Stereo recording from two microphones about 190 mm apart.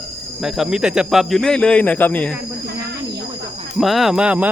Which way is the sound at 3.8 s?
Centre (ahead or behind).